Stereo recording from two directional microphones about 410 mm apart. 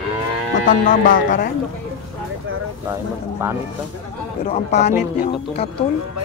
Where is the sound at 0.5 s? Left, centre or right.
Centre.